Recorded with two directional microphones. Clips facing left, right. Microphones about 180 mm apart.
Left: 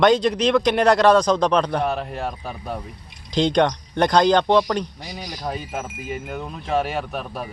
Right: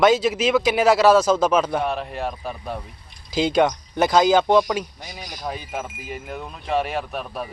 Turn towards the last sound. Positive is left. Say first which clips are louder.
# even
turn(degrees=0)  # may be behind; listen again after turning